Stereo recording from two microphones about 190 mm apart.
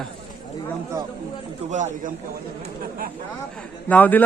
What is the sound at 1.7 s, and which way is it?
Speech, 40° right (ahead or behind).